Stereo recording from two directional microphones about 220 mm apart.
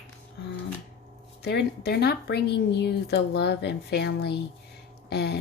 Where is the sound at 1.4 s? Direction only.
45° left (ahead or behind).